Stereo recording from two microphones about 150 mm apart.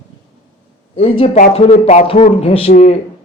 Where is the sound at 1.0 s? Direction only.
40° left (ahead or behind).